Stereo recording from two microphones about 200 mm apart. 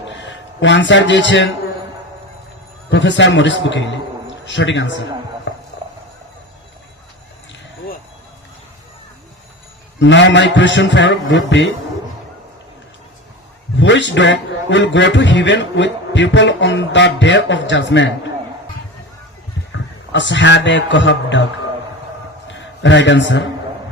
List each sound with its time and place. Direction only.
0.2 s a man's voice: 65° left (ahead or behind)
2.9 s a man's voice: 65° left (ahead or behind)
5.5 s clip-clop: 60° left (ahead or behind)
10.0 s a man's voice: 65° left (ahead or behind)
13.7 s a man's voice: 65° left (ahead or behind)
19.7 s a man's voice: 65° left (ahead or behind)
22.5 s a man's voice: 65° left (ahead or behind)